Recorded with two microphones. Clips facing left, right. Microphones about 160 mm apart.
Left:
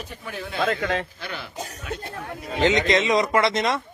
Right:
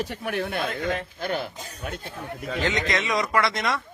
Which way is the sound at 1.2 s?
45° right (ahead or behind).